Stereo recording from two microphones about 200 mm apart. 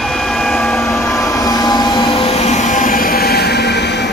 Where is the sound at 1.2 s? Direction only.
15° left (ahead or behind).